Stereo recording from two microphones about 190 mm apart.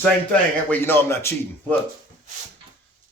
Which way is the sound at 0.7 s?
10° left (ahead or behind).